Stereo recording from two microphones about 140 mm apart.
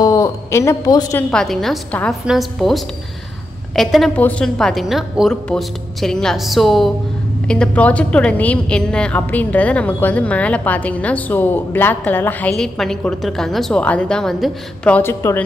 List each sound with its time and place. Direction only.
0.0 s a man's voice: 20° left (ahead or behind)
1.3 s a woman's voice: 5° left (ahead or behind)
15.0 s a woman's voice: 15° left (ahead or behind)